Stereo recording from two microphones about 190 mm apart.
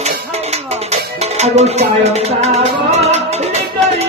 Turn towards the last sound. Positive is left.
turn(degrees=-35)  # may be behind; listen again after turning